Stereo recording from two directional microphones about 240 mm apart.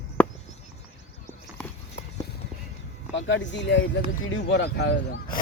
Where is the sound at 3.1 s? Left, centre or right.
Left.